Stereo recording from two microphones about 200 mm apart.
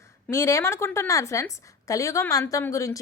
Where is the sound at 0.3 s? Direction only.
15° left (ahead or behind).